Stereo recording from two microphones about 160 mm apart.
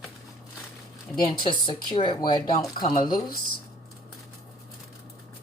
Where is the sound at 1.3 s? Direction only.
30° left (ahead or behind).